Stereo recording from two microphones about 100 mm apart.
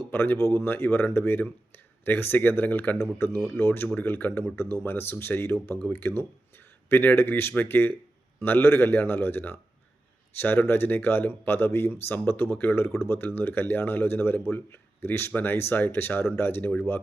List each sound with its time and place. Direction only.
0.1 s speech: 20° left (ahead or behind)